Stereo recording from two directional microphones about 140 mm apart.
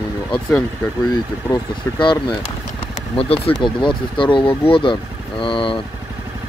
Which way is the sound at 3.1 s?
45° left (ahead or behind).